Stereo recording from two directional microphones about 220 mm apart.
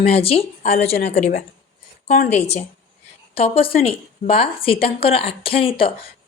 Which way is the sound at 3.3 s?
25° left (ahead or behind).